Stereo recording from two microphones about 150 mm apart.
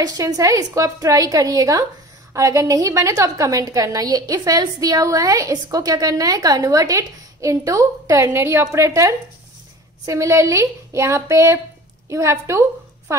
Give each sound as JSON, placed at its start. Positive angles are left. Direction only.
{"t": 0.0, "sound": "a woman's voice", "side_deg": -25}